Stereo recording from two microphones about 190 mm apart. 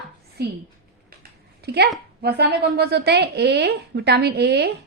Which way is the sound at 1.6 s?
60° right (ahead or behind).